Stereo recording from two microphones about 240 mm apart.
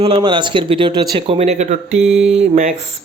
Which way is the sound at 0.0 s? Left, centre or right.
Centre.